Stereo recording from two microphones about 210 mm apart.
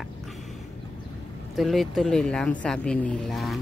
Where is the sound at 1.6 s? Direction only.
Centre (ahead or behind).